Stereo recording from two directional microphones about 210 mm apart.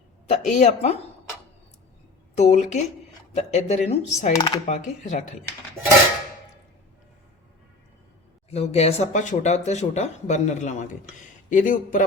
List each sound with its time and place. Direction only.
0.3 s speech: 35° left (ahead or behind)
2.3 s speech: 30° left (ahead or behind)
4.4 s speech: 20° left (ahead or behind)
4.7 s speech: 35° left (ahead or behind)
8.4 s speech: 30° left (ahead or behind)